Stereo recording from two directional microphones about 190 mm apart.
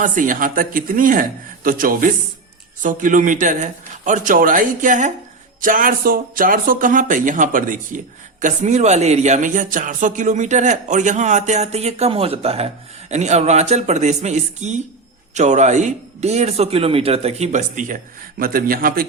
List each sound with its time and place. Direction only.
0.0 s speech: 45° right (ahead or behind)